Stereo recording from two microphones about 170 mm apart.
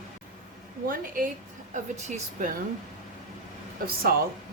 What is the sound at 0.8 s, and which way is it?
Speech, 55° right (ahead or behind).